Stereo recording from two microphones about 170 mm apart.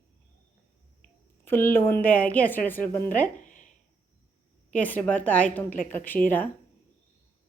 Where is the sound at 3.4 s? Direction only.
50° left (ahead or behind).